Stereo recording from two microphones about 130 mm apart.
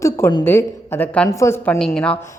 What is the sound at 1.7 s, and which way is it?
Speech, 5° left (ahead or behind).